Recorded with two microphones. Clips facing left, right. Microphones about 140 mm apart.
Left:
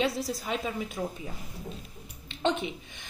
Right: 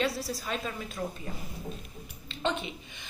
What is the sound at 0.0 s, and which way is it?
Speech, 20° left (ahead or behind).